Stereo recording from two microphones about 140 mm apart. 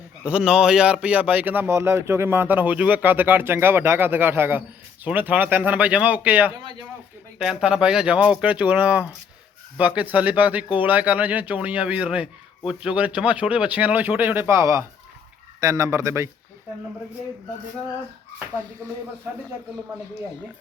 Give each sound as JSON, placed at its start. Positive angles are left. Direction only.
{"t": 0.3, "sound": "speech", "side_deg": -10}
{"t": 18.8, "sound": "speech", "side_deg": -20}